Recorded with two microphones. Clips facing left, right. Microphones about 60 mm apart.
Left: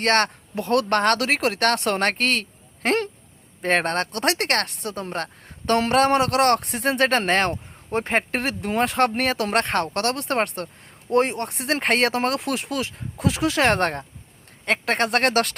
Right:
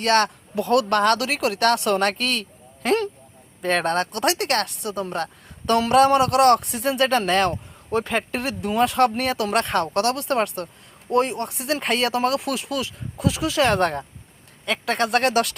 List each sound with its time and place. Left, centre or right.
0.0 s speech: left